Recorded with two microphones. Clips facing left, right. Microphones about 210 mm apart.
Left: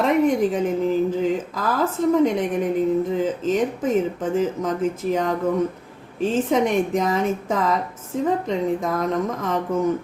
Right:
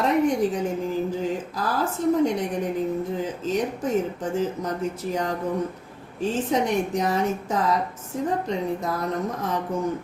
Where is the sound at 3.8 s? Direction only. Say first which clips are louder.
Left 3 dB; 90° left.